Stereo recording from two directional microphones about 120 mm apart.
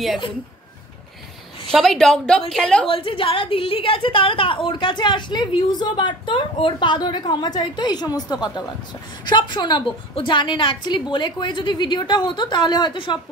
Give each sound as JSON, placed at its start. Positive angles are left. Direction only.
{"t": 1.7, "sound": "a woman's voice", "side_deg": 0}
{"t": 2.9, "sound": "a woman's voice", "side_deg": 50}